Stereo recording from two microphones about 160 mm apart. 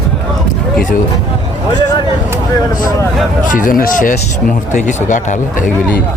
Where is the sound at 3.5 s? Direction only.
60° left (ahead or behind).